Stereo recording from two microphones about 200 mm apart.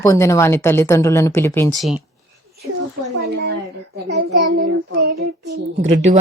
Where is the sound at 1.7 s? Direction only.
Centre (ahead or behind).